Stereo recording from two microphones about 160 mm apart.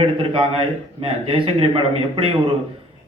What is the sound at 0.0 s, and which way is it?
A man's voice, 35° right (ahead or behind).